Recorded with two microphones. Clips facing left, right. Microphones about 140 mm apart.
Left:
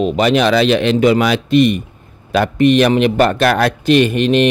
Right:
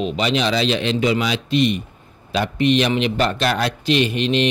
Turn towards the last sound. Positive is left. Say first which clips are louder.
# left 6 dB
turn(degrees=50)  # may be behind; listen again after turning